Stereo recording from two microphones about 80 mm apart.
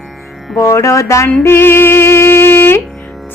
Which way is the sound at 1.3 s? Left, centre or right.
Left.